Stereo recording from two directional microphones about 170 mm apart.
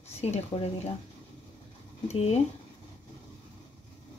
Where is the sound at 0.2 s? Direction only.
40° left (ahead or behind).